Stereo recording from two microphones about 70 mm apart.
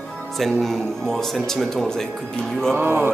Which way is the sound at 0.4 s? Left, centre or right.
Centre.